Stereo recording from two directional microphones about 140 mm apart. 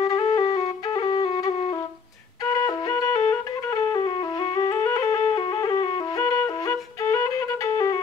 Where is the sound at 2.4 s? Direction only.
25° left (ahead or behind).